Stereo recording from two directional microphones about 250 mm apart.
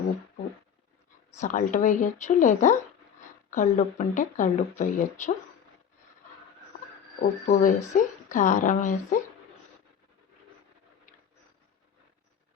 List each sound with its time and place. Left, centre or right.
1.3 s speech: left
7.2 s speech: left